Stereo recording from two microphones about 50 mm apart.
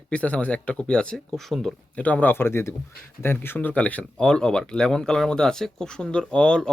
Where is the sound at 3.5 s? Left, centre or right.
Left.